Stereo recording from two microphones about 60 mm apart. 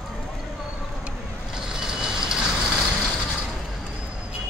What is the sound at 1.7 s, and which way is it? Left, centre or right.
Vehicle, centre.